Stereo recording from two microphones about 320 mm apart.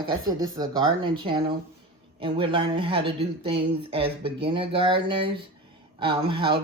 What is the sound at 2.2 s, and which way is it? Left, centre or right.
Speech, centre.